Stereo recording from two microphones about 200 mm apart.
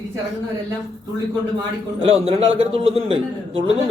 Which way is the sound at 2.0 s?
30° right (ahead or behind).